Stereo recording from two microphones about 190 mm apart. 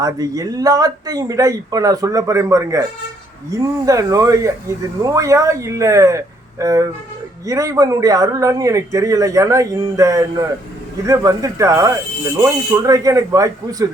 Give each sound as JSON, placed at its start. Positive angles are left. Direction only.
{"t": 0.0, "sound": "a man's voice", "side_deg": -20}